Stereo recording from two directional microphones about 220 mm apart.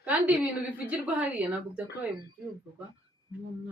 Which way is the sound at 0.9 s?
5° right (ahead or behind).